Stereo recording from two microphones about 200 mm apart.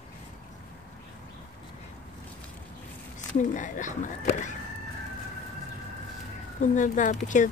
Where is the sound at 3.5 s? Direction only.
40° left (ahead or behind).